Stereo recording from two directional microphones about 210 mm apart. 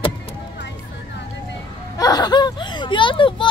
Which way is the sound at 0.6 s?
55° left (ahead or behind).